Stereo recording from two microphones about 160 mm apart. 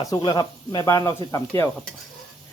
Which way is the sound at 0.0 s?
25° left (ahead or behind).